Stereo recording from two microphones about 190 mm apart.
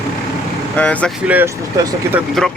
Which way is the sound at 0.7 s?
5° left (ahead or behind).